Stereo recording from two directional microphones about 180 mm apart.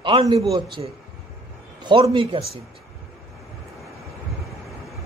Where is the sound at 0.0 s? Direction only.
35° right (ahead or behind).